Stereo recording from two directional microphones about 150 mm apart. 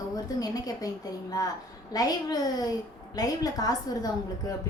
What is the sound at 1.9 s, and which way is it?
A woman's voice, 25° left (ahead or behind).